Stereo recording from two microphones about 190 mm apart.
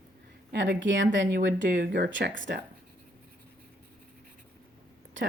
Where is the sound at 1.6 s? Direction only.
60° right (ahead or behind).